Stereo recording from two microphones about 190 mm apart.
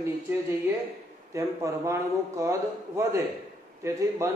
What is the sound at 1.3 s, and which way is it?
A man's voice, 15° right (ahead or behind).